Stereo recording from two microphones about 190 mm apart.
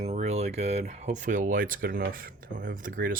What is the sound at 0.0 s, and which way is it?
Speech, 35° right (ahead or behind).